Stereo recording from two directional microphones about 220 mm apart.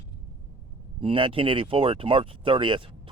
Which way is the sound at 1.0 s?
25° right (ahead or behind).